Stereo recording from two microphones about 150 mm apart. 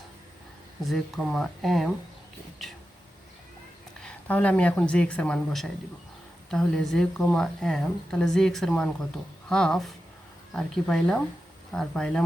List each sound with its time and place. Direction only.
0.8 s a woman's voice: centre (ahead or behind)
4.0 s a woman's voice: 10° left (ahead or behind)